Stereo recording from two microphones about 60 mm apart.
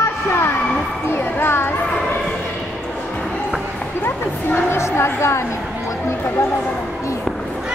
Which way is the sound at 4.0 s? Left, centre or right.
Left.